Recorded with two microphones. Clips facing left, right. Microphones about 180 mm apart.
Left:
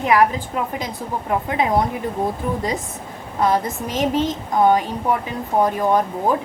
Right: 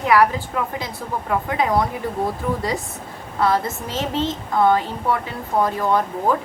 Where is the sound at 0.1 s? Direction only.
20° left (ahead or behind).